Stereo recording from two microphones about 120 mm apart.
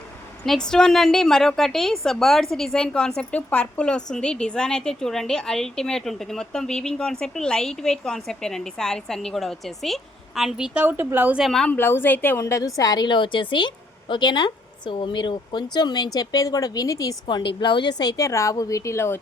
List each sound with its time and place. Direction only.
0.4 s a woman's voice: 5° left (ahead or behind)
10.8 s speech: 15° right (ahead or behind)
11.3 s a woman's voice: centre (ahead or behind)
11.8 s a woman's voice: 20° left (ahead or behind)
17.2 s a woman's voice: 45° left (ahead or behind); by 19.2 s 20° left (ahead or behind)